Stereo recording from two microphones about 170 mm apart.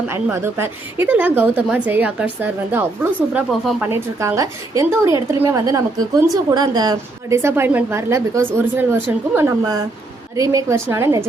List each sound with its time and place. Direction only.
0.1 s a woman's voice: 15° right (ahead or behind)